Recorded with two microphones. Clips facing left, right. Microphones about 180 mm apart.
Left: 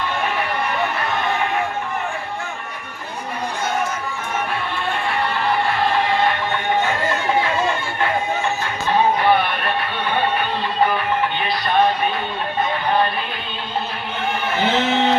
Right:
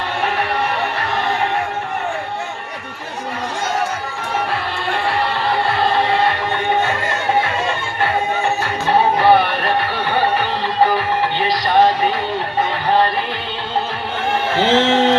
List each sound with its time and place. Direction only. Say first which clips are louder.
9.1 s music: right 4 dB; 35° right (ahead or behind)
11.4 s music: right 5 dB; 90° right
14.6 s a sound: right 4 dB; 90° right